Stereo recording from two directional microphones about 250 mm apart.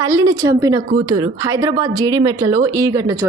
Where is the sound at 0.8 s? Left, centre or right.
Right.